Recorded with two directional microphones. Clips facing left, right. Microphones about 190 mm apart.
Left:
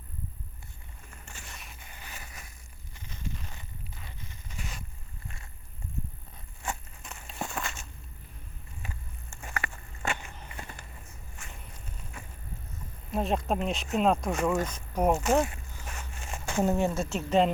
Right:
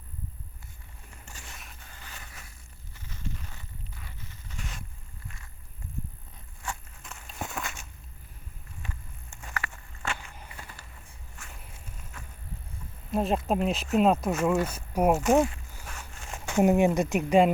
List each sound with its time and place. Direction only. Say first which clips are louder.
1.8 s music: left 1 dB; 15° left (ahead or behind)
3.1 s a sound: even; 20° left (ahead or behind)
4.5 s a sound: even; 5° left (ahead or behind)
7.3 s walk: left 1 dB; centre (ahead or behind)
9.6 s walk: left 1 dB; 15° left (ahead or behind)
13.1 s speech: right 2 dB; centre (ahead or behind)